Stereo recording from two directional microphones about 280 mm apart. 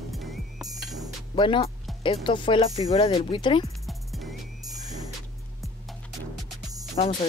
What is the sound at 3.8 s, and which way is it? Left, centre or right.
Music, centre.